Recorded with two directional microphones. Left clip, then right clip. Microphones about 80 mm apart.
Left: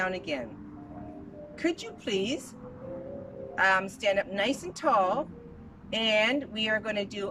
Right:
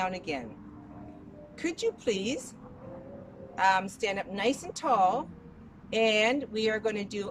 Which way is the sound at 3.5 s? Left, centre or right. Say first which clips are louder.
Left 1 dB; right.